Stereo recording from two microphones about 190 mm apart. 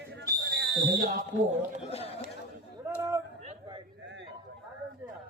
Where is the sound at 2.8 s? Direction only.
15° right (ahead or behind).